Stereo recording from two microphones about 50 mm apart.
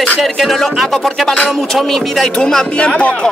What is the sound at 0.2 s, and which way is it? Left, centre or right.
Speech, centre.